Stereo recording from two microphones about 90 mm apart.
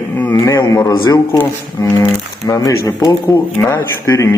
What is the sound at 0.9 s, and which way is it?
Speech, 45° left (ahead or behind).